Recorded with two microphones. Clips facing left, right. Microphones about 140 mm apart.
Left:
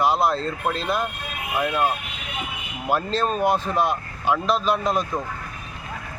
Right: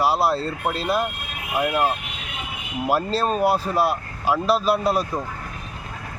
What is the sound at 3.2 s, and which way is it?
Speech, 5° right (ahead or behind).